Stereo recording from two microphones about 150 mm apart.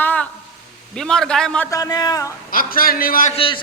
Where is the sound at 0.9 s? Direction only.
5° left (ahead or behind).